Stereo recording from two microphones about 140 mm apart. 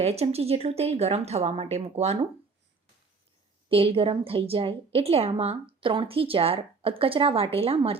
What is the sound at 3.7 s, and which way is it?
Speech, 40° right (ahead or behind).